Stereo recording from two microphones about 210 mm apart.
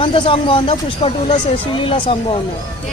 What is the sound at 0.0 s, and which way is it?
Speech, 25° left (ahead or behind).